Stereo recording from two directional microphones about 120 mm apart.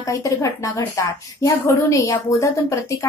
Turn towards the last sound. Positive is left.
turn(degrees=25)  # may be behind; listen again after turning